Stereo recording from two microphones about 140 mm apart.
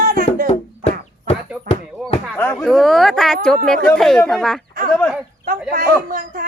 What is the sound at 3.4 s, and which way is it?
Speech, 5° left (ahead or behind).